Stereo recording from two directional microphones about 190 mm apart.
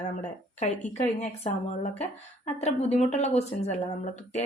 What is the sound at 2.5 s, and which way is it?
A woman's voice, 35° left (ahead or behind).